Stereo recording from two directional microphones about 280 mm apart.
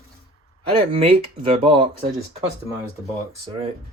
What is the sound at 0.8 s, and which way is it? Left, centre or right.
Speech, centre.